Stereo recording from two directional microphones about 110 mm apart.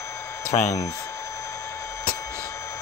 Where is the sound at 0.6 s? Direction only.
30° left (ahead or behind).